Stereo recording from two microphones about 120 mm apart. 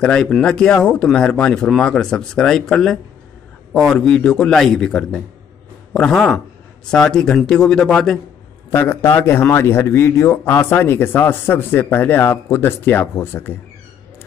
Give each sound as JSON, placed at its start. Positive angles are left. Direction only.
{"t": 0.0, "sound": "a man's voice", "side_deg": 5}
{"t": 8.6, "sound": "a man's voice", "side_deg": 20}